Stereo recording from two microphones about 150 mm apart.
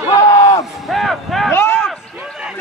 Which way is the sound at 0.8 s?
Centre (ahead or behind).